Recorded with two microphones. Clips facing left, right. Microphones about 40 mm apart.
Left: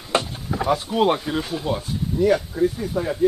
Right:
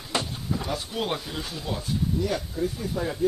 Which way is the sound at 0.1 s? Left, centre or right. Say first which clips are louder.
Left 6 dB; left.